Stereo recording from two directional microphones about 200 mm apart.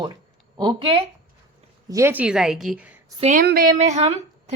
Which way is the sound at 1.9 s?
10° right (ahead or behind).